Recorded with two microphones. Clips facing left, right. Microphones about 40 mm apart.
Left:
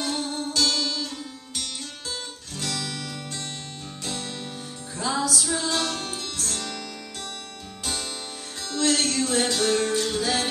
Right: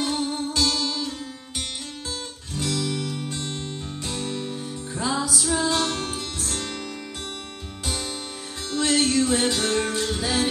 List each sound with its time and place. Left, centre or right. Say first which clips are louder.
0.0 s music: right 3 dB; centre
2.5 s music: right 5 dB; centre
8.6 s music: right 2 dB; centre